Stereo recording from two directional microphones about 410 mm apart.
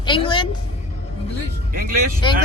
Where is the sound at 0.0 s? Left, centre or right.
Centre.